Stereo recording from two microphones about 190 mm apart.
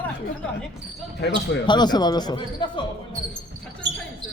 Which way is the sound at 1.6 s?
20° left (ahead or behind).